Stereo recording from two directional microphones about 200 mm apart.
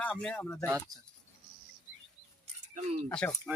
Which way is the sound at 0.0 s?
5° left (ahead or behind).